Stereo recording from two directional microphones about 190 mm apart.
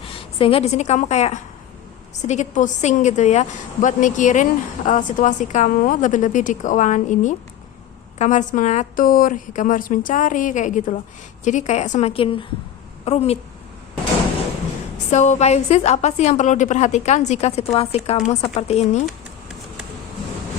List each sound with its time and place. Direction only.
0.0 s a woman's voice: 30° left (ahead or behind)
15.1 s a woman's voice: 40° left (ahead or behind)